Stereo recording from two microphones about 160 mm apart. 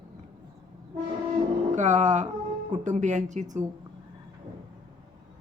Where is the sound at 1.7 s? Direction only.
50° right (ahead or behind).